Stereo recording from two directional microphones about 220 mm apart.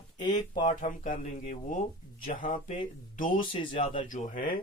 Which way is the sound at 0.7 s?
35° left (ahead or behind).